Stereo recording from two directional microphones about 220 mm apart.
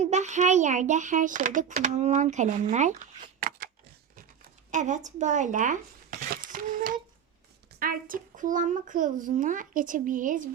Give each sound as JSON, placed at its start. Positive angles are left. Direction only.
{"t": 0.0, "sound": "a child's voice", "side_deg": -30}
{"t": 4.7, "sound": "a child's voice", "side_deg": -35}